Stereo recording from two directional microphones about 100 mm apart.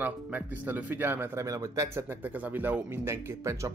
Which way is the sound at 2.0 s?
15° right (ahead or behind).